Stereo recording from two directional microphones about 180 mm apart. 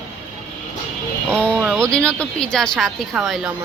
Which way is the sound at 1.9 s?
5° left (ahead or behind).